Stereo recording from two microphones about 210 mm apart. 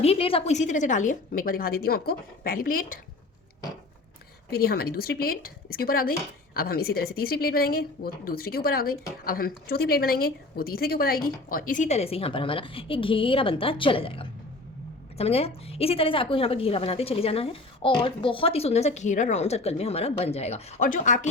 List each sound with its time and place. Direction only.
0.0 s a woman's voice: 25° left (ahead or behind); by 3.0 s 40° left (ahead or behind)
4.5 s a woman's voice: 45° left (ahead or behind)